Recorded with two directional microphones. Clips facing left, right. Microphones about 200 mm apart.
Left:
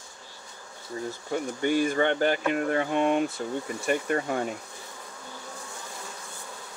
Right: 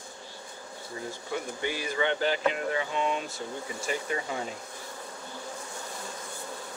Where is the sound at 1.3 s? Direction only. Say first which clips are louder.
Left 7 dB; 50° left (ahead or behind).